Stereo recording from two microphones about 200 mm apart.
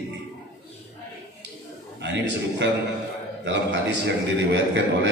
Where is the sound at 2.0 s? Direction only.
60° right (ahead or behind).